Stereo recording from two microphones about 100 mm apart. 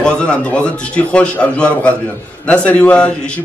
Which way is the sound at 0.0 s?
10° left (ahead or behind).